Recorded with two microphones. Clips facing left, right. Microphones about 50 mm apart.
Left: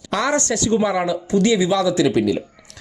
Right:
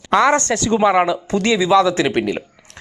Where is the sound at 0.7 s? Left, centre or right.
Right.